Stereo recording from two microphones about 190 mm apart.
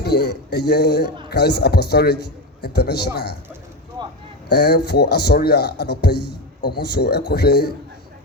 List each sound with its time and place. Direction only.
0.0 s a man's voice: 60° left (ahead or behind)
4.4 s a man's voice: 60° left (ahead or behind)